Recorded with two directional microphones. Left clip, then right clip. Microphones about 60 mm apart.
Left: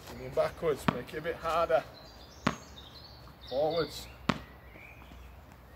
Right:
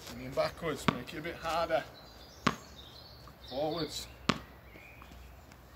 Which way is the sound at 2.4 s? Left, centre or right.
Centre.